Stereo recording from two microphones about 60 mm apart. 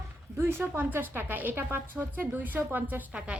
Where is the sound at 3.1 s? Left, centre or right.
Centre.